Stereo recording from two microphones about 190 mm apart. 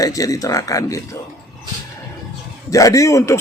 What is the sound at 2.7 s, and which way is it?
Speech, 15° left (ahead or behind).